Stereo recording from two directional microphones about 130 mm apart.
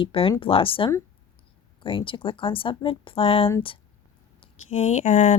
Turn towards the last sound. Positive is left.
turn(degrees=60)  # may be behind; listen again after turning